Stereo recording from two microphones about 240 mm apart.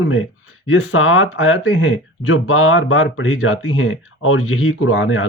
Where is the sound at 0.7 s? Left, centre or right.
Left.